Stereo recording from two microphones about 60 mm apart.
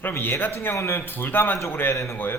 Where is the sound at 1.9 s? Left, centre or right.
Left.